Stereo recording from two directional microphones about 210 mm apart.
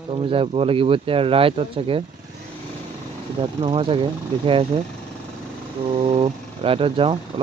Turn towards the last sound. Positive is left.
turn(degrees=-25)  # may be behind; listen again after turning